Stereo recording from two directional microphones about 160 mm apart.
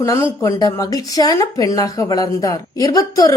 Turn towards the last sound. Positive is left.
turn(degrees=20)  # may be behind; listen again after turning